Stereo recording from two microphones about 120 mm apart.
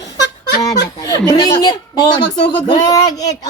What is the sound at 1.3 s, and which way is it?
Speech, 35° left (ahead or behind).